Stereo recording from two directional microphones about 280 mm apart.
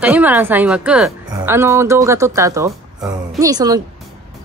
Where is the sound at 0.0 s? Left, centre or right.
Centre.